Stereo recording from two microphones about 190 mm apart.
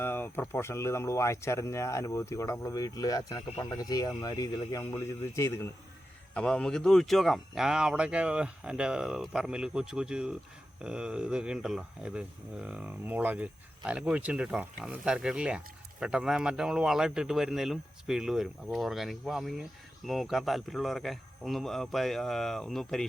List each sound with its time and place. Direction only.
0.0 s speech: 10° left (ahead or behind)